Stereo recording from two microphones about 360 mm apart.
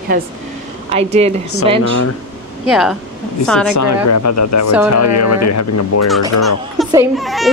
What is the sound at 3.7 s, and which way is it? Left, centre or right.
Speech, left.